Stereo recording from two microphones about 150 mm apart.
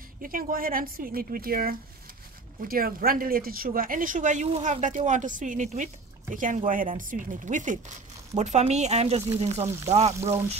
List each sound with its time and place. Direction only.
0.2 s speech: 70° right (ahead or behind); by 10.1 s 45° right (ahead or behind)